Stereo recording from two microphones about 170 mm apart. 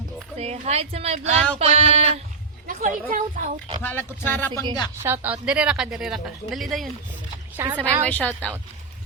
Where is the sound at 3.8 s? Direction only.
10° left (ahead or behind).